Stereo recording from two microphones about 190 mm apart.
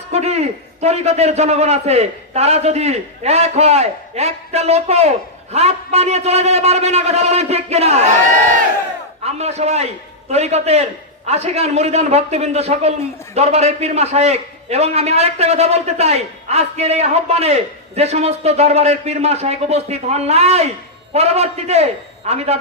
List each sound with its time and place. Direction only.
0.1 s a man's voice: 35° right (ahead or behind)
9.2 s a man's voice: 35° right (ahead or behind)